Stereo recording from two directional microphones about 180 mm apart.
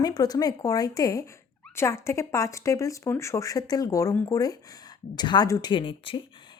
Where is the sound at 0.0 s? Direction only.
20° left (ahead or behind).